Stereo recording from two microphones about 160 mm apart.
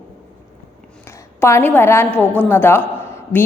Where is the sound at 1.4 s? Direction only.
15° left (ahead or behind).